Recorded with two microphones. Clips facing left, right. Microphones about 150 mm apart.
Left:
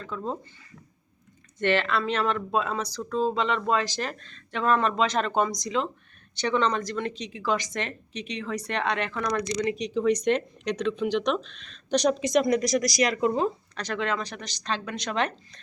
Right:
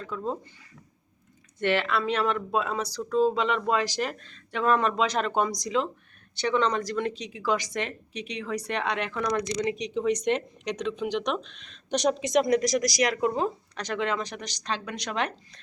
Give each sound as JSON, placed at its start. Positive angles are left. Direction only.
{"t": 0.0, "sound": "speech", "side_deg": -5}
{"t": 1.5, "sound": "speech", "side_deg": -10}